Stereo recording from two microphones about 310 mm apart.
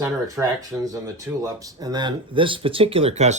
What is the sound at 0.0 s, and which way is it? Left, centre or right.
Speech, centre.